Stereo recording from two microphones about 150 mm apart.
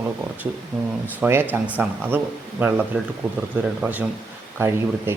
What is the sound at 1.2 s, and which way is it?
A man's voice, 15° right (ahead or behind).